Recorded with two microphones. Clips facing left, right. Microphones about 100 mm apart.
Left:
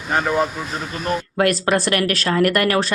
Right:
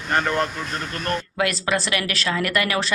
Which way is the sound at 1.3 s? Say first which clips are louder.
Left 7 dB; 45° left (ahead or behind).